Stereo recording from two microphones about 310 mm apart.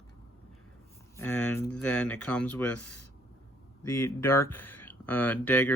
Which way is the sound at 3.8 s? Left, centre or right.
Centre.